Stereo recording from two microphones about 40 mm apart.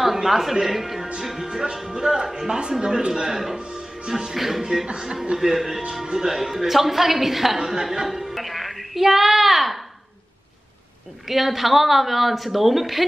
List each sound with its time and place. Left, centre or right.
0.0 s a woman's voice: centre
3.5 s music: right
4.4 s a woman's voice: centre
4.8 s a woman's voice: centre
11.2 s speech: centre